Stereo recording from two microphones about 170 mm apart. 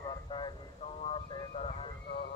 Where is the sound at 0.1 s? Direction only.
25° left (ahead or behind).